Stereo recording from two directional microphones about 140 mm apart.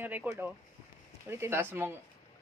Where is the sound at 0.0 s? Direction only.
15° right (ahead or behind).